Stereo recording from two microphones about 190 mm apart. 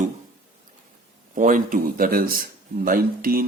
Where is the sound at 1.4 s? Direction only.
45° right (ahead or behind).